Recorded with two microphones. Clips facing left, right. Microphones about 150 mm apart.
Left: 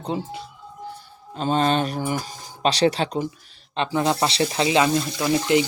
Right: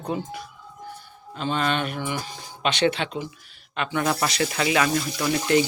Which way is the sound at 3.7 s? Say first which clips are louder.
Left 3 dB; 30° left (ahead or behind).